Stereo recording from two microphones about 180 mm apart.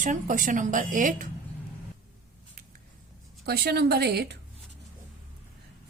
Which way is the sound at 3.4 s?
60° right (ahead or behind).